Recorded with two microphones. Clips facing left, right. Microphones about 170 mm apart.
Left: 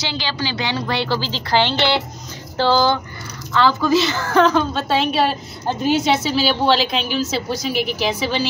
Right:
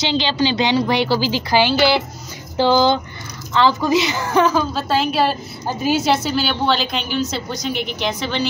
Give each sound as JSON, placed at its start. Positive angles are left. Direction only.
{"t": 0.0, "sound": "a woman's voice", "side_deg": -20}